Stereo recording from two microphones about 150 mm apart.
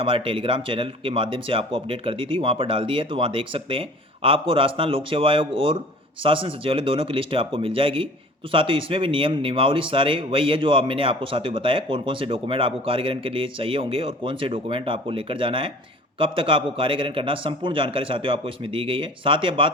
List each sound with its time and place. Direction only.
0.0 s speech: 35° right (ahead or behind)